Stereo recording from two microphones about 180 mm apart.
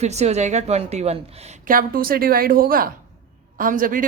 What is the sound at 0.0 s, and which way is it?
A woman's voice, 40° right (ahead or behind).